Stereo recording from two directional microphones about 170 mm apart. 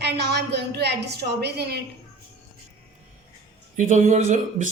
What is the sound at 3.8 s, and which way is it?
Speech, 45° right (ahead or behind).